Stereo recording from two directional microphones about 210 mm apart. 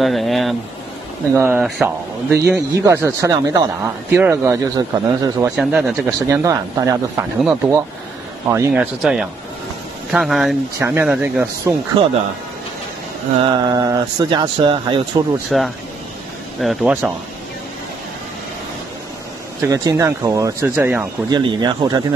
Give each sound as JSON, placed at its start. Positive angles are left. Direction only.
{"t": 0.0, "sound": "speech", "side_deg": 0}
{"t": 1.3, "sound": "speech", "side_deg": -10}
{"t": 2.5, "sound": "speech", "side_deg": -15}
{"t": 5.6, "sound": "speech", "side_deg": 0}
{"t": 6.2, "sound": "speech", "side_deg": -15}
{"t": 8.5, "sound": "speech", "side_deg": -15}
{"t": 13.4, "sound": "speech", "side_deg": -20}
{"t": 15.5, "sound": "speech", "side_deg": 0}
{"t": 19.6, "sound": "speech", "side_deg": -15}
{"t": 21.3, "sound": "speech", "side_deg": -20}